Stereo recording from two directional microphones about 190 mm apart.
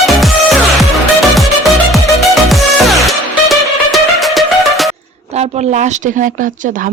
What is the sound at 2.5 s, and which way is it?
Music, centre (ahead or behind).